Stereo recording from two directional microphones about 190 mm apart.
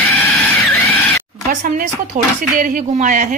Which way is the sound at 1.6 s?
45° right (ahead or behind).